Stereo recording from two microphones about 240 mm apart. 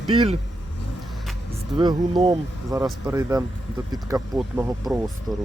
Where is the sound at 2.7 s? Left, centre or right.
Centre.